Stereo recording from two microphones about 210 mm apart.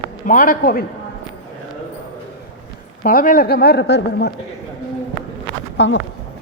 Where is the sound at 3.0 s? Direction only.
40° left (ahead or behind).